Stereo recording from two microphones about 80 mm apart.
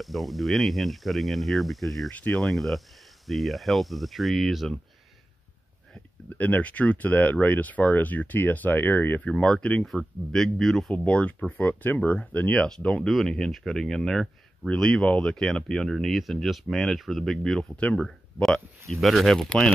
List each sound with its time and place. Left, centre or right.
0.0 s speech: centre
6.3 s speech: centre
9.3 s speech: centre
9.8 s speech: centre
11.1 s speech: centre
17.9 s speech: centre